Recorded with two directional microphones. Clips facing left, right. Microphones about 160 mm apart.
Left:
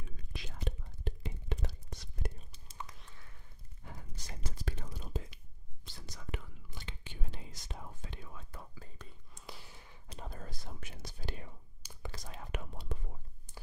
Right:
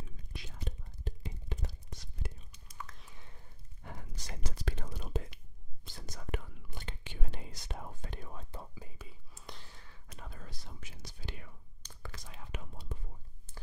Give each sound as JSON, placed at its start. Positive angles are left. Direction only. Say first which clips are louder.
{"t": 0.3, "sound": "whispering", "louder": "left 4 dB", "side_deg": 90}
{"t": 2.5, "sound": "whispering", "louder": "left 1 dB", "side_deg": 25}
{"t": 3.8, "sound": "whispering", "louder": "right 3 dB", "side_deg": -80}
{"t": 5.9, "sound": "whispering", "louder": "right 4 dB", "side_deg": -45}
{"t": 7.1, "sound": "whispering", "louder": "right 3 dB", "side_deg": -70}
{"t": 8.7, "sound": "whispering", "louder": "right 2 dB", "side_deg": -10}
{"t": 10.0, "sound": "whispering", "louder": "left 4 dB", "side_deg": 30}
{"t": 10.4, "sound": "whispering", "louder": "left 3 dB", "side_deg": 50}
{"t": 11.8, "sound": "whispering", "louder": "left 2 dB", "side_deg": 10}
{"t": 12.1, "sound": "whispering", "louder": "left 4 dB", "side_deg": 40}
{"t": 12.4, "sound": "whispering", "louder": "left 3 dB", "side_deg": 70}